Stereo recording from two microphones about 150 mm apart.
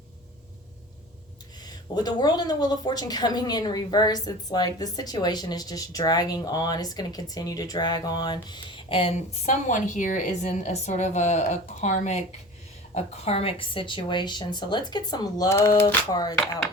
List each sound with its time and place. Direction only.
1.6 s speech: 25° left (ahead or behind)
9.6 s a woman's voice: 55° left (ahead or behind); by 16.3 s 25° left (ahead or behind)